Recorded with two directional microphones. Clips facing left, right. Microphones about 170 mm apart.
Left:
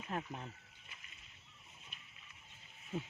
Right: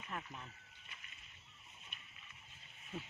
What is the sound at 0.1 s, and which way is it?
Speech, 35° left (ahead or behind).